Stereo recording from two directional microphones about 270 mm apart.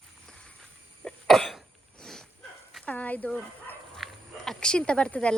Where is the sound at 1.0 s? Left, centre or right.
Centre.